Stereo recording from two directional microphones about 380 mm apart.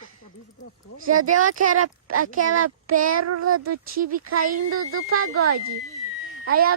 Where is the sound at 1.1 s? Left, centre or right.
Right.